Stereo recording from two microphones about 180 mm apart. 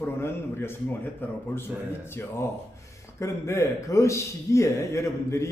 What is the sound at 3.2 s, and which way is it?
A man's voice, 15° left (ahead or behind).